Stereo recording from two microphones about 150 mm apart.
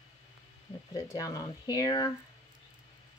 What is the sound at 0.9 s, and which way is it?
Speech, 25° left (ahead or behind).